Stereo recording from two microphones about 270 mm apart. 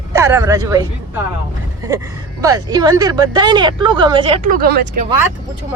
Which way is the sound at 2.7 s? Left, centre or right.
Centre.